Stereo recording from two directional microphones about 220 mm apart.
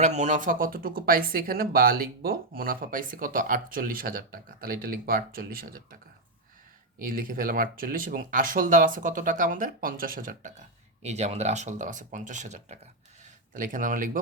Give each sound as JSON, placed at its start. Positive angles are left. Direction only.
{"t": 0.0, "sound": "speech", "side_deg": -30}
{"t": 7.1, "sound": "speech", "side_deg": -40}